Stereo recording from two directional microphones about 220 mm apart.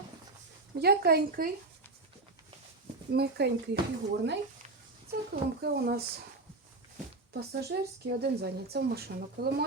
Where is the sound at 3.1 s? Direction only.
45° right (ahead or behind).